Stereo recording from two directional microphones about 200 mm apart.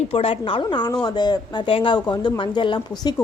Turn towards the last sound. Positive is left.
turn(degrees=20)  # may be behind; listen again after turning